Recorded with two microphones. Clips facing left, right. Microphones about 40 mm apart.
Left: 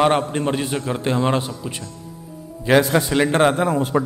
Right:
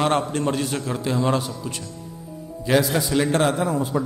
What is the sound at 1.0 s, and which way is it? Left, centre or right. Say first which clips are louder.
Speech: left 2 dB; left.